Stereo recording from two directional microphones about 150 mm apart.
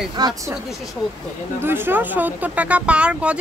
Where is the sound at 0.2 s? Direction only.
25° right (ahead or behind).